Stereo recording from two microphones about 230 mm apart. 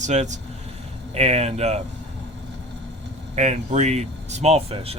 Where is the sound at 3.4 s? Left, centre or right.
Right.